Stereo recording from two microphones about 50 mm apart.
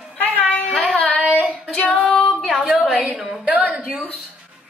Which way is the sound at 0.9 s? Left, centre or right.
Left.